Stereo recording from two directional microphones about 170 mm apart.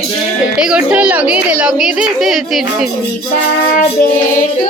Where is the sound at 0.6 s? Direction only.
5° right (ahead or behind).